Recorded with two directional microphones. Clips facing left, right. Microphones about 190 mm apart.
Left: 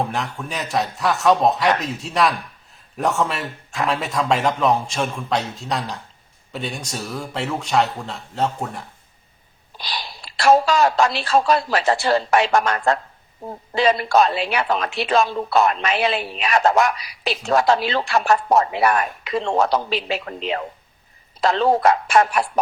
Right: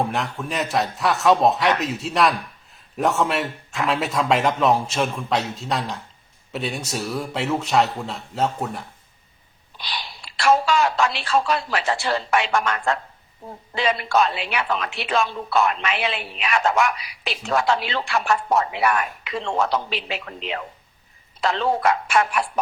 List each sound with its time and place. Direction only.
0.0 s a man's voice: centre (ahead or behind)
9.8 s a woman's voice: 40° left (ahead or behind)